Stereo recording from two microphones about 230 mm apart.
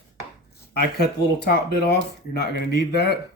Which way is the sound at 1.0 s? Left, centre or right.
Left.